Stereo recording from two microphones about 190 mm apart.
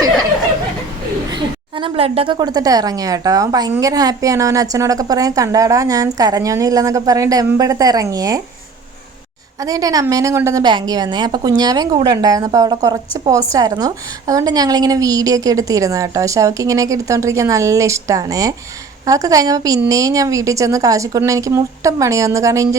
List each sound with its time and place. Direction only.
1.3 s a woman's voice: 25° right (ahead or behind)
9.6 s a woman's voice: 20° right (ahead or behind)